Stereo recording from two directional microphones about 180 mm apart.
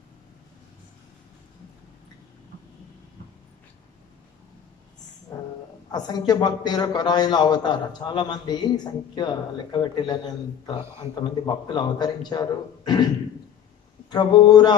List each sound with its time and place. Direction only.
5.9 s a man's voice: 20° left (ahead or behind)
11.4 s a man's voice: 25° left (ahead or behind)
14.1 s a man's voice: 25° left (ahead or behind)